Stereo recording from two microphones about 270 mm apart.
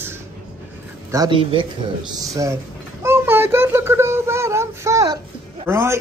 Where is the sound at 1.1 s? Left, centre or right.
Centre.